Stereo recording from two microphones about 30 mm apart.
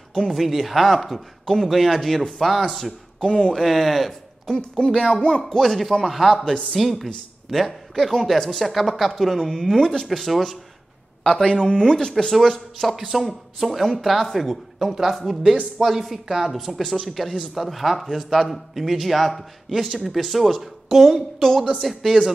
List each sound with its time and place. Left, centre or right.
0.3 s speech: centre
3.3 s speech: left
3.5 s speech: centre
4.6 s speech: left
5.6 s speech: centre
6.4 s speech: left
6.7 s speech: centre
9.8 s speech: centre
10.0 s speech: centre
11.3 s speech: left
12.2 s speech: centre